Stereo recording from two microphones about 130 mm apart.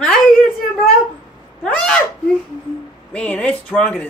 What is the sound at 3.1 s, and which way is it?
Speech, 10° left (ahead or behind).